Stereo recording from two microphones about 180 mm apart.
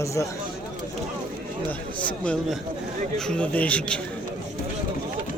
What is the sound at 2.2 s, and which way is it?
A man's voice, 5° left (ahead or behind).